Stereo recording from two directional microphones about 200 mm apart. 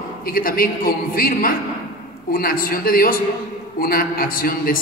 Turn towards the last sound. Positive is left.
turn(degrees=45)  # may be behind; listen again after turning